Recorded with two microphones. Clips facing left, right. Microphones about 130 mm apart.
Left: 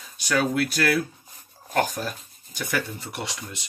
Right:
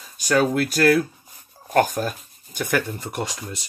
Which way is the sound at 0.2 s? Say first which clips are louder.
Right 4 dB; 45° right (ahead or behind).